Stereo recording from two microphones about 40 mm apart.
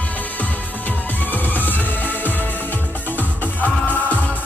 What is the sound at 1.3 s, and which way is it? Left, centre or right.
Music, left.